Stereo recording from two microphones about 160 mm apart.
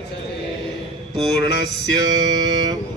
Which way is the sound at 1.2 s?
30° right (ahead or behind).